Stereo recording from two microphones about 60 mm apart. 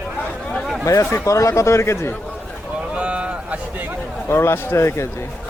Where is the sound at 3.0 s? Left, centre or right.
Centre.